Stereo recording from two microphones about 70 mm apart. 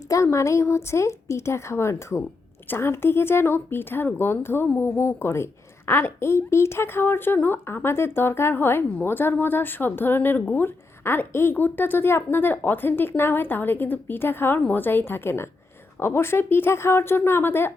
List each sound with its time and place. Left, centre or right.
0.1 s a woman's voice: left